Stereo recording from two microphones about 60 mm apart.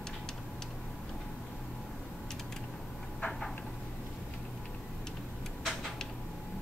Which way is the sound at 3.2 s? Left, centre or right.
Centre.